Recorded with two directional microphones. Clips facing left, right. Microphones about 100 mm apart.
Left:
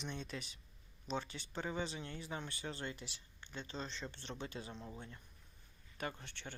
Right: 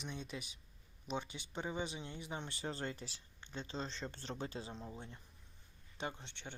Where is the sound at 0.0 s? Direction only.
10° right (ahead or behind).